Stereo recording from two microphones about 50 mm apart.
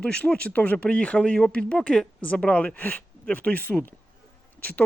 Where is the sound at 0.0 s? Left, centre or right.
Centre.